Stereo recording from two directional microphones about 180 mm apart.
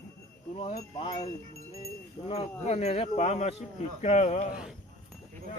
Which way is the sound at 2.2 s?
35° left (ahead or behind).